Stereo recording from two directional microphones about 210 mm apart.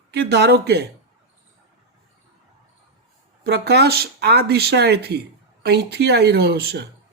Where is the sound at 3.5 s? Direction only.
50° right (ahead or behind).